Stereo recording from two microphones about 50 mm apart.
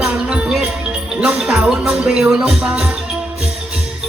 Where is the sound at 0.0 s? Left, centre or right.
Centre.